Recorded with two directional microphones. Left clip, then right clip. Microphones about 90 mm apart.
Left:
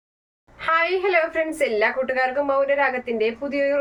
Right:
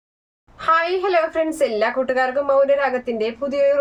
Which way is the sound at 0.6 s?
40° right (ahead or behind).